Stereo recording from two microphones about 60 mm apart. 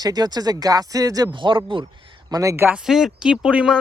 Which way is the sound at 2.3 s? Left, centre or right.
Right.